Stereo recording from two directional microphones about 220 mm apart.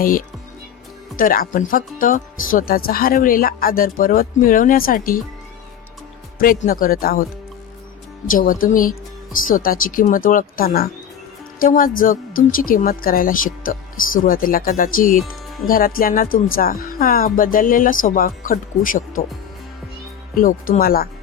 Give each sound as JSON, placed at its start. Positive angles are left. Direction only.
{"t": 1.1, "sound": "speech", "side_deg": 40}
{"t": 6.6, "sound": "speech", "side_deg": 40}
{"t": 8.3, "sound": "speech", "side_deg": 40}
{"t": 20.3, "sound": "speech", "side_deg": 40}